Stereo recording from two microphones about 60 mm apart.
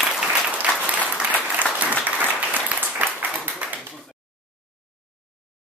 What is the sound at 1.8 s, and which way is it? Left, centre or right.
Applause, right.